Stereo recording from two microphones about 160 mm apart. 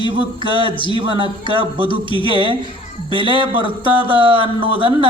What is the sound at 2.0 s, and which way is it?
Speech, 30° left (ahead or behind).